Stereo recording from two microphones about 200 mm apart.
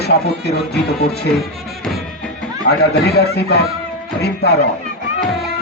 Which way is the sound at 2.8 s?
55° left (ahead or behind).